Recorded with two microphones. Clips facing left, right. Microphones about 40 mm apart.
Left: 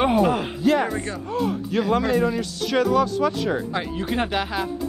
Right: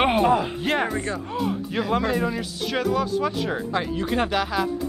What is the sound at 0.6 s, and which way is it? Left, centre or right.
Speech, right.